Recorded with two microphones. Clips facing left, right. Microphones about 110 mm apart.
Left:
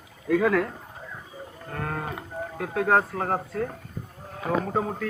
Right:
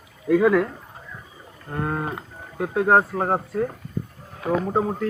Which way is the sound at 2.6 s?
25° right (ahead or behind).